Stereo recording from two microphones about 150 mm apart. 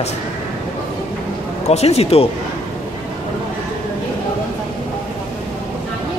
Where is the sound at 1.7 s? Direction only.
45° left (ahead or behind).